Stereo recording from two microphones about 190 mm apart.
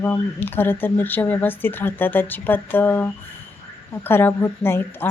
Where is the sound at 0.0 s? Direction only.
10° left (ahead or behind).